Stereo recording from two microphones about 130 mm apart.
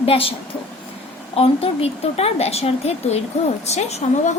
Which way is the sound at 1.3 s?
50° left (ahead or behind).